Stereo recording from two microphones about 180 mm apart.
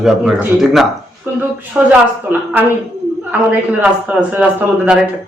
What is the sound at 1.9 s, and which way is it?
Speech, 10° right (ahead or behind).